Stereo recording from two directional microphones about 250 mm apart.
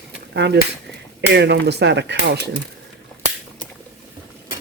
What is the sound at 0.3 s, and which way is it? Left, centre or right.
Speech, right.